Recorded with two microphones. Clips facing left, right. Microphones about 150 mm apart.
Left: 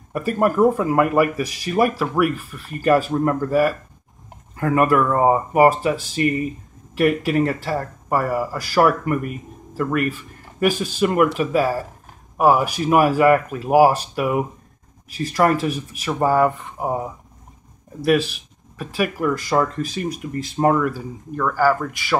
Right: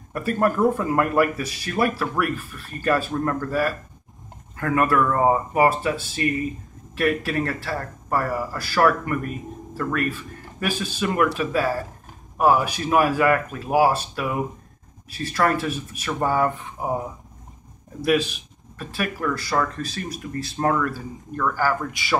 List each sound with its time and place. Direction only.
0.1 s speech: 10° left (ahead or behind)
18.0 s speech: centre (ahead or behind)
21.3 s speech: 5° left (ahead or behind)